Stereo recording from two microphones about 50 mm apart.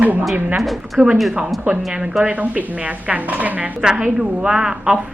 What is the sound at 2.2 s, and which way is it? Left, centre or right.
A woman's voice, right.